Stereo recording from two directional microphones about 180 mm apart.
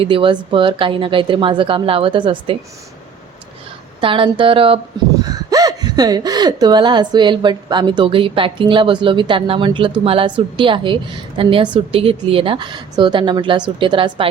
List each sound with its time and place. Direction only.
0.0 s a woman's voice: 30° right (ahead or behind)
4.0 s a woman's voice: 30° right (ahead or behind)
5.5 s a woman's voice: 20° right (ahead or behind)